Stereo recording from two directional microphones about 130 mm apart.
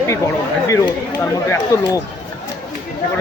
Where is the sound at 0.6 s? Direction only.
25° left (ahead or behind).